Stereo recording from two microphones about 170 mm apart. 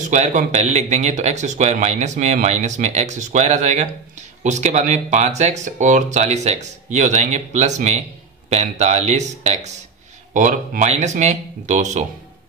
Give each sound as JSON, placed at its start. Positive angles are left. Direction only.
{"t": 0.0, "sound": "speech", "side_deg": -45}